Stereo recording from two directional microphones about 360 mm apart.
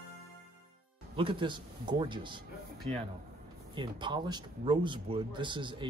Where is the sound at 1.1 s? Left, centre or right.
Centre.